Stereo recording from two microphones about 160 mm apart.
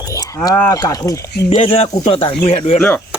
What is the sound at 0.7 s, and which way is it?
Speech, 20° left (ahead or behind).